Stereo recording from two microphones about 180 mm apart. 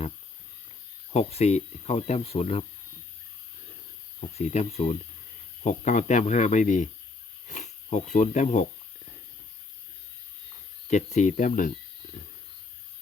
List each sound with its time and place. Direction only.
1.1 s speech: 35° left (ahead or behind)
4.4 s speech: 40° left (ahead or behind)
10.8 s speech: 40° left (ahead or behind)